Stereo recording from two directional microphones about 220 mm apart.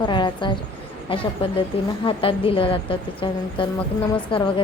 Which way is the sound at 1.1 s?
25° left (ahead or behind).